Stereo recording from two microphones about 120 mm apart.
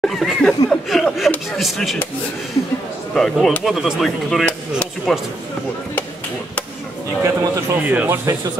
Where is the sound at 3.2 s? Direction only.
5° left (ahead or behind).